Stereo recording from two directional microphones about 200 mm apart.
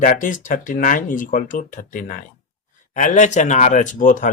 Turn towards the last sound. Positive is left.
turn(degrees=40)  # may be behind; listen again after turning